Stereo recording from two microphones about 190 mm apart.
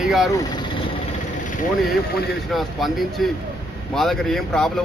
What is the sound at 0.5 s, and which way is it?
Vehicle, 25° left (ahead or behind).